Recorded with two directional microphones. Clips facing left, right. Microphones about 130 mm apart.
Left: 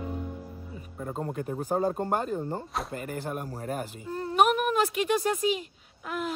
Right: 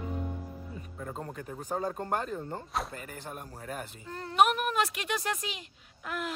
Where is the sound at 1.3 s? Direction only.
45° left (ahead or behind).